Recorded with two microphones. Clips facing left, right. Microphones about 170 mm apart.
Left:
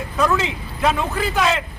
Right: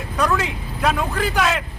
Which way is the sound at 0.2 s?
Centre (ahead or behind).